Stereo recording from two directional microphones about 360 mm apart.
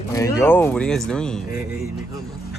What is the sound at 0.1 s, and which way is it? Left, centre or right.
Speech, centre.